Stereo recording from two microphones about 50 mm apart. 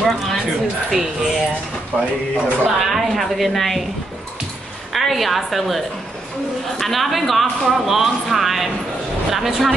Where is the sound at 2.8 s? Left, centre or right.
Centre.